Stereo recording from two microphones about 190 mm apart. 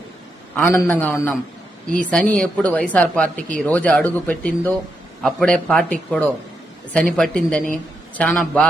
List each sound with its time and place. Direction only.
0.5 s a woman's voice: 10° left (ahead or behind)